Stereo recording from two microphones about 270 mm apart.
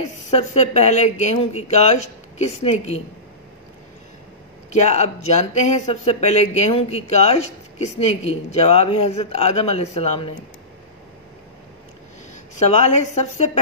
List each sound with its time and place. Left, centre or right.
0.0 s speech: left
4.8 s speech: left
12.6 s speech: left